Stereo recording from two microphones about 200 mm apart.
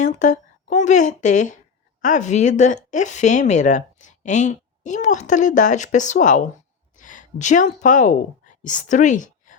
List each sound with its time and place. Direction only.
0.0 s a woman's voice: 40° left (ahead or behind)